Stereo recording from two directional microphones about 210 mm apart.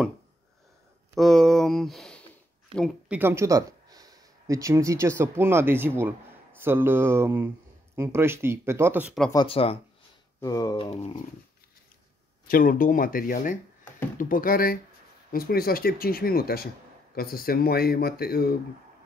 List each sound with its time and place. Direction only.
1.1 s speech: centre (ahead or behind)
3.2 s speech: 10° right (ahead or behind)
9.3 s speech: 25° left (ahead or behind)
12.4 s speech: 45° left (ahead or behind)